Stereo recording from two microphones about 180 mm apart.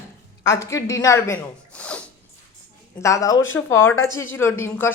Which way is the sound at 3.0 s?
20° left (ahead or behind).